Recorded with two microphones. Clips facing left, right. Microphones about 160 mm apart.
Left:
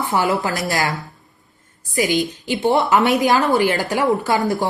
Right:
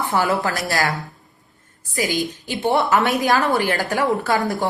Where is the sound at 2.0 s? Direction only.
20° left (ahead or behind).